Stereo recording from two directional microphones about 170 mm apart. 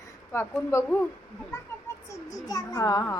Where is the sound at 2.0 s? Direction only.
20° left (ahead or behind).